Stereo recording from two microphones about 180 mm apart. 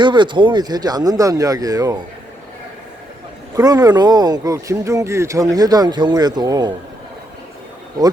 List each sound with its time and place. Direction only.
0.0 s speech: 25° right (ahead or behind)
3.5 s speech: 20° right (ahead or behind)